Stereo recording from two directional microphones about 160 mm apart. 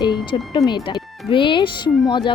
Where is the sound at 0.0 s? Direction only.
30° left (ahead or behind).